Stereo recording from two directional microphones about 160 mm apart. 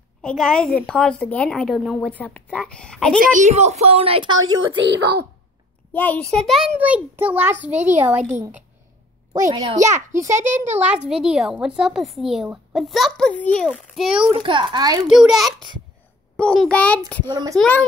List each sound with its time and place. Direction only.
0.2 s a woman's voice: 5° left (ahead or behind)
3.2 s a woman's voice: 50° right (ahead or behind); by 4.5 s 30° right (ahead or behind)
4.8 s a child's voice: 90° right
5.9 s a woman's voice: 10° left (ahead or behind); by 7.5 s 10° right (ahead or behind)
7.9 s a woman's voice: 50° right (ahead or behind)
8.4 s a child's voice: 15° right (ahead or behind)
14.3 s a woman's voice: 30° right (ahead or behind)
15.0 s a child's voice: 5° right (ahead or behind)
17.3 s a child's voice: 25° right (ahead or behind)
17.6 s a woman's voice: 10° left (ahead or behind)